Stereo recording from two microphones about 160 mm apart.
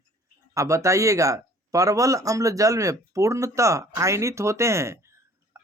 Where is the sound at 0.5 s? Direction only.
20° right (ahead or behind).